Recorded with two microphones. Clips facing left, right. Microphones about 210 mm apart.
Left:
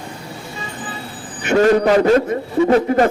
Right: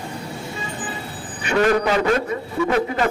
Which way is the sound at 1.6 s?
40° left (ahead or behind).